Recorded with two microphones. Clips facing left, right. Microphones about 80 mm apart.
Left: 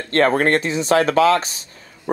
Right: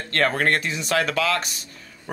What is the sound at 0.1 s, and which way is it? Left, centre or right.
Speech, left.